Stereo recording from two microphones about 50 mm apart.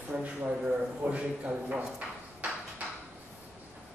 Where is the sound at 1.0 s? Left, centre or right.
Right.